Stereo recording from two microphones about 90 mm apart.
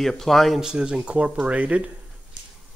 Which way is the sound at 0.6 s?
10° right (ahead or behind).